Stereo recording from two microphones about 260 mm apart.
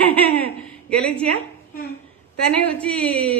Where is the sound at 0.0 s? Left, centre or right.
Centre.